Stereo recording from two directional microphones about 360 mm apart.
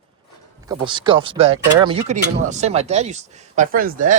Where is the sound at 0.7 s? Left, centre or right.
Centre.